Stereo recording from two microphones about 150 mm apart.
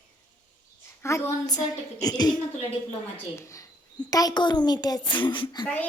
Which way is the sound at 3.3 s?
20° left (ahead or behind).